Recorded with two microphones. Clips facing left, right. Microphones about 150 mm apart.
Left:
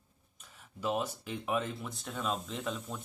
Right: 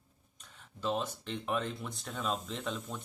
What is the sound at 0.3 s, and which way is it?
Speech, 5° left (ahead or behind).